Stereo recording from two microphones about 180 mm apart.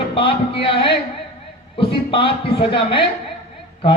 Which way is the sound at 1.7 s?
30° left (ahead or behind).